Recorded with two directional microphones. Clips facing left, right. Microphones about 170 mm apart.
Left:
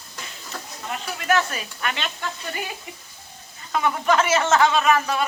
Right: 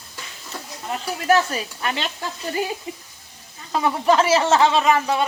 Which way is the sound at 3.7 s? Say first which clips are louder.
Right 3 dB; 30° right (ahead or behind).